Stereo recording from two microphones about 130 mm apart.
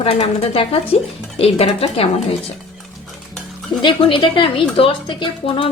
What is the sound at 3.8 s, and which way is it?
A woman's voice, 40° left (ahead or behind).